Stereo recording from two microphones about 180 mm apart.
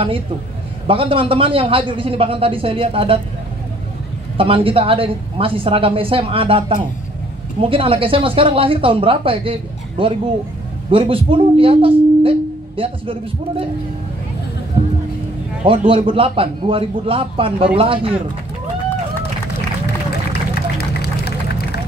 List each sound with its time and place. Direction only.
0.8 s a woman's voice: 30° right (ahead or behind)
4.4 s a woman's voice: 30° right (ahead or behind)
15.6 s a woman's voice: 30° right (ahead or behind)
20.7 s a sound: 60° left (ahead or behind)